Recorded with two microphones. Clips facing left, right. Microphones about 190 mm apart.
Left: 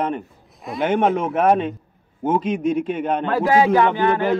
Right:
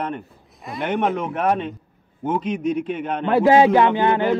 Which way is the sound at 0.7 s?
Centre (ahead or behind).